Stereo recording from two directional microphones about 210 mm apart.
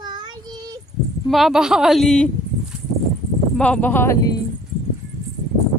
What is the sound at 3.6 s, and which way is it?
Speech, 5° left (ahead or behind).